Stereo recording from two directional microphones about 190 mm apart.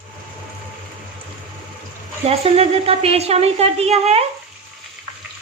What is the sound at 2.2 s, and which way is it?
Speech, 30° right (ahead or behind).